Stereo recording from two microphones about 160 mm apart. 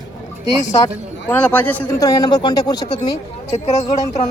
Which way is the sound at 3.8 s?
20° left (ahead or behind).